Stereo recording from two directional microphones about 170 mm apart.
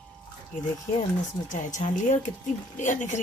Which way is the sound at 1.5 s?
45° left (ahead or behind).